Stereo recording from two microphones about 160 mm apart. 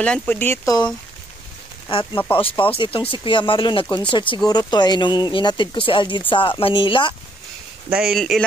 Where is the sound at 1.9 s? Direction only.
30° left (ahead or behind).